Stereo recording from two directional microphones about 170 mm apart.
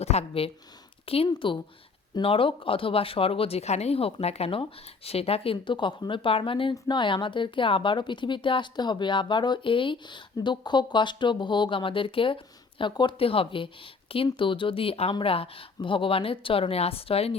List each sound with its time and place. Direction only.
0.0 s speech: 40° left (ahead or behind)